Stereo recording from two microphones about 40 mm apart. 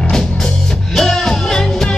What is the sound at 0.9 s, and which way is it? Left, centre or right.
Music, centre.